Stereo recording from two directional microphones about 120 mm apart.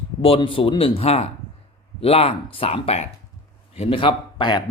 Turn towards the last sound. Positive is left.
turn(degrees=40)  # may be behind; listen again after turning